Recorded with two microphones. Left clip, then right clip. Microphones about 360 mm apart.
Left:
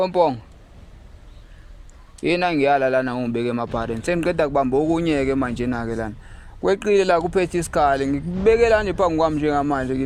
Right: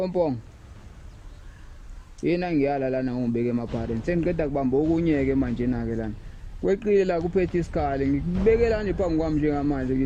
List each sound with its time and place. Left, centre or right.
0.0 s speech: left
2.4 s speech: left